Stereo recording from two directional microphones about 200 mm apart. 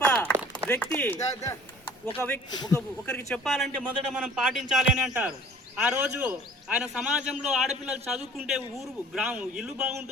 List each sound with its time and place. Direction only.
0.0 s a sound: 5° left (ahead or behind)
0.7 s speech: 10° left (ahead or behind)
2.5 s a man's voice: 20° left (ahead or behind)
3.1 s a man's voice: 5° left (ahead or behind)